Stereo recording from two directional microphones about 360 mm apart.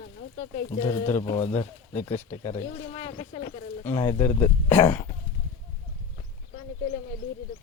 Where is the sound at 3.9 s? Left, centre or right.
Centre.